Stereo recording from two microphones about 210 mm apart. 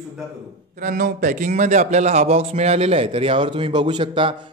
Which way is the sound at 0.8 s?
40° right (ahead or behind).